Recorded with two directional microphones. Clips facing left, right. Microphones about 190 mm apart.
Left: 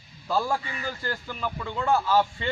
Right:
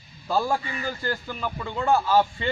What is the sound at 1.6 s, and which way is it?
Speech, 15° right (ahead or behind).